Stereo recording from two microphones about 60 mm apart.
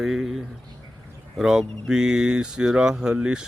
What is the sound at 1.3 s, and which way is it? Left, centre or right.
Speech, centre.